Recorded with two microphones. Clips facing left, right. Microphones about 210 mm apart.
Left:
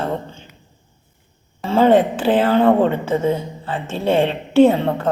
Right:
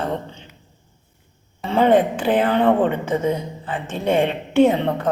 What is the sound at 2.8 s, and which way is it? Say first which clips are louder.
A woman's voice: left 2 dB; 30° left (ahead or behind).